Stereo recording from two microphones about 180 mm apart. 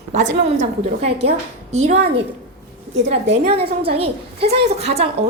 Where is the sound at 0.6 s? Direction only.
35° right (ahead or behind).